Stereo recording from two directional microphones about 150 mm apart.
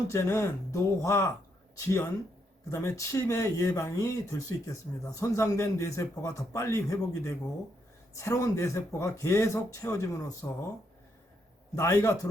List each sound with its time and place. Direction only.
0.1 s speech: 20° left (ahead or behind)
11.7 s speech: 20° left (ahead or behind)